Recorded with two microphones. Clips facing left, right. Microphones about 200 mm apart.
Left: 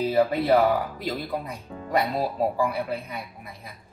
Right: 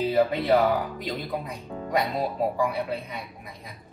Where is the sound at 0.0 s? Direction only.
Centre (ahead or behind).